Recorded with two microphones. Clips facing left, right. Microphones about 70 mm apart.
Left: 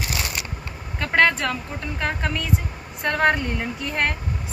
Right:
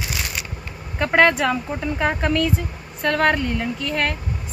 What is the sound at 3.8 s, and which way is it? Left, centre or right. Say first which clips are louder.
Speech: left 1 dB; left.